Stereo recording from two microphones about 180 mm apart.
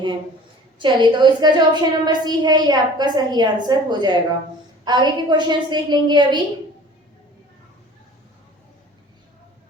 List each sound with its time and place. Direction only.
0.8 s a woman's voice: 25° right (ahead or behind)